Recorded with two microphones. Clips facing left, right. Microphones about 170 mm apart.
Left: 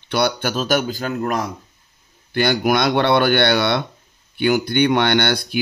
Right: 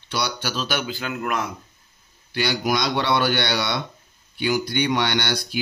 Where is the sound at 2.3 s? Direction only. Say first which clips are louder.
Left 6 dB; 55° left (ahead or behind).